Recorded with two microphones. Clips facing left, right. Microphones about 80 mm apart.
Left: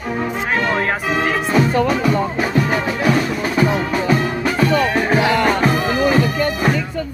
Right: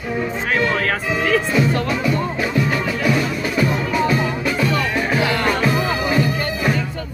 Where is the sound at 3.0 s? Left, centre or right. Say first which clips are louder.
Left 2 dB; left.